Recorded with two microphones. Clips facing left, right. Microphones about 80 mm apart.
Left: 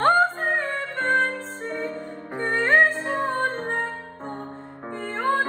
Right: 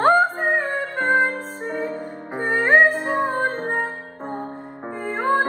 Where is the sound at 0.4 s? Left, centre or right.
Right.